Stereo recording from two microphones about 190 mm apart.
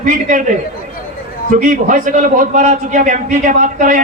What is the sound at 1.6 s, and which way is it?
A man's voice, 45° right (ahead or behind).